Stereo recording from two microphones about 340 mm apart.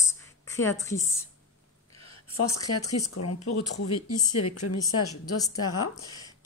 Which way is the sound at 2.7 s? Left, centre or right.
Left.